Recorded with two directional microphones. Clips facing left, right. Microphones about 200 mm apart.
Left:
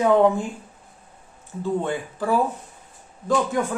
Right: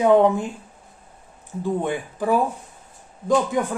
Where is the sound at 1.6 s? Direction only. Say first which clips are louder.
Right 1 dB; 15° right (ahead or behind).